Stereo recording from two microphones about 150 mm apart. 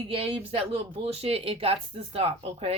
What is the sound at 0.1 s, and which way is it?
Speech, 40° right (ahead or behind).